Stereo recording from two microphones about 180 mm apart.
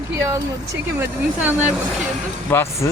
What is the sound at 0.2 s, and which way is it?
Speech, 15° right (ahead or behind).